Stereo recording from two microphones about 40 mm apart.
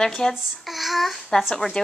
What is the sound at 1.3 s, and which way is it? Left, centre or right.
Speech, left.